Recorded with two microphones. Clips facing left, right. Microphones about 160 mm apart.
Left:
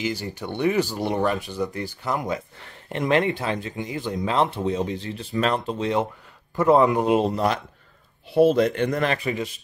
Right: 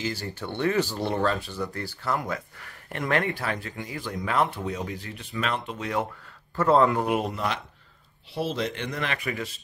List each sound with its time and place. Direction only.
0.0 s speech: 15° left (ahead or behind)
6.5 s speech: 15° left (ahead or behind); by 7.6 s 40° left (ahead or behind)
8.3 s speech: 50° left (ahead or behind)
9.2 s speech: 20° left (ahead or behind)